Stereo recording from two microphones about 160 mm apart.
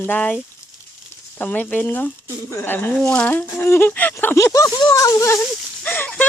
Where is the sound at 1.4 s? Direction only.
10° left (ahead or behind).